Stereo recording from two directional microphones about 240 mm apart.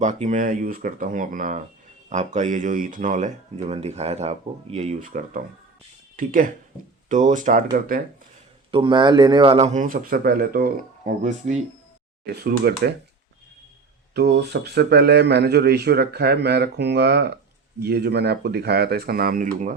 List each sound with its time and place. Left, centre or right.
0.0 s speech: right
8.7 s speech: centre
12.2 s speech: right
14.1 s speech: right